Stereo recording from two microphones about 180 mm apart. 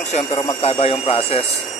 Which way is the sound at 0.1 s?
35° left (ahead or behind).